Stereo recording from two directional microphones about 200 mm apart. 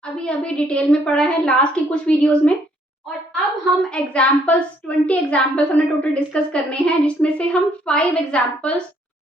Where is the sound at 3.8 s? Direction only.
5° left (ahead or behind).